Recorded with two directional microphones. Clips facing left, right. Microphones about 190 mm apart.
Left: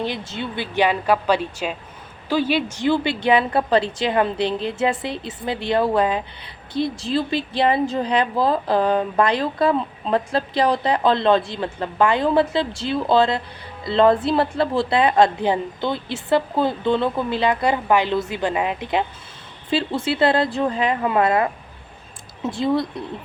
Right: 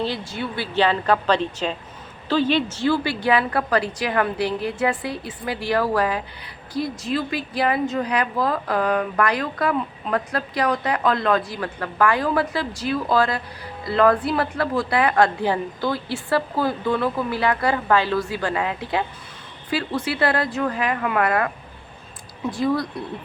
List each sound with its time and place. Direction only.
0.0 s a woman's voice: 20° left (ahead or behind)